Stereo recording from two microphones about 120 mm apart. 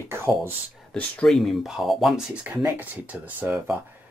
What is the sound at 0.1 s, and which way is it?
Speech, 20° right (ahead or behind).